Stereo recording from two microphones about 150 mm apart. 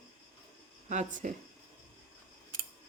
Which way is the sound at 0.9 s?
55° right (ahead or behind).